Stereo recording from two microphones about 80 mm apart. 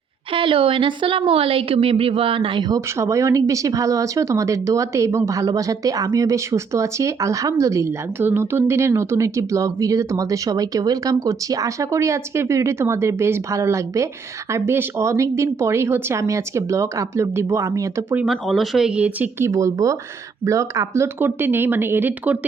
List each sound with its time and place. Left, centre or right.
0.3 s speech: right
2.7 s speech: right
8.2 s speech: right
18.3 s speech: centre
18.9 s speech: centre
19.4 s speech: right